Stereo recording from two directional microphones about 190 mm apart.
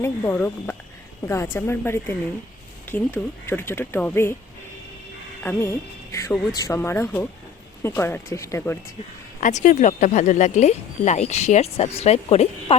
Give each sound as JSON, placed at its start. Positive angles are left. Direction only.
{"t": 0.0, "sound": "speech", "side_deg": 10}
{"t": 5.4, "sound": "speech", "side_deg": 10}
{"t": 9.4, "sound": "speech", "side_deg": 40}